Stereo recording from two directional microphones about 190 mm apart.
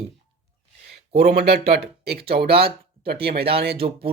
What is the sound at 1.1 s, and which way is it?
Speech, 60° right (ahead or behind).